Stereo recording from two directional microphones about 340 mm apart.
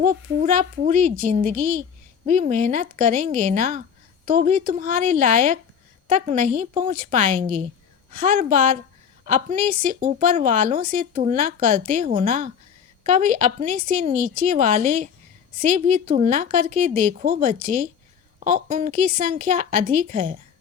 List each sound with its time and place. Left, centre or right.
0.0 s a woman's voice: right